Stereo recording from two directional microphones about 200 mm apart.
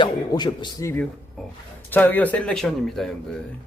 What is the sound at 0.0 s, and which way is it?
Speech, 20° left (ahead or behind).